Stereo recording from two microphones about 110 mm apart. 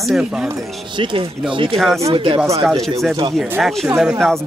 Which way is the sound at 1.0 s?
50° right (ahead or behind).